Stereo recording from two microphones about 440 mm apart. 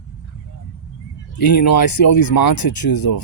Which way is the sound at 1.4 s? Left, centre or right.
Left.